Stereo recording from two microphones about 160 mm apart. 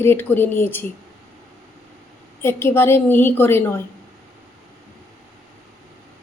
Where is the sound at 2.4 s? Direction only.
15° left (ahead or behind).